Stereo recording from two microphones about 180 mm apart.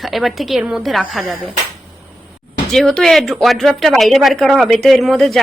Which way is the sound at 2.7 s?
Centre (ahead or behind).